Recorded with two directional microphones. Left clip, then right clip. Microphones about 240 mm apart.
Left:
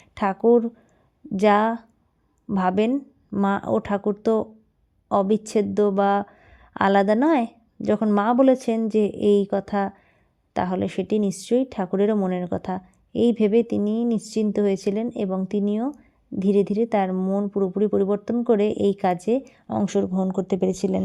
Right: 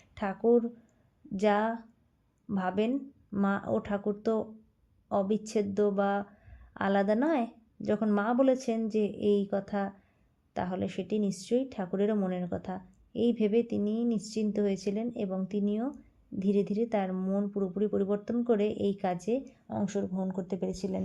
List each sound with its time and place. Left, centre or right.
0.1 s speech: left